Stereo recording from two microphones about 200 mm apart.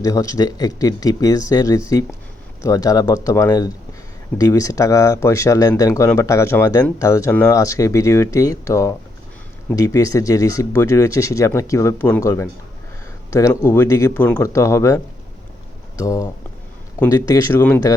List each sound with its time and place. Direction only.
0.0 s speech: 15° left (ahead or behind)